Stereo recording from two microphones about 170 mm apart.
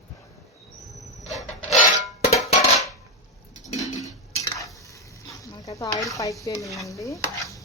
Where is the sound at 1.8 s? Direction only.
50° left (ahead or behind).